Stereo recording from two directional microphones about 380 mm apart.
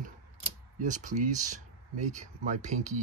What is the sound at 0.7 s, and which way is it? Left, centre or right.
Speech, centre.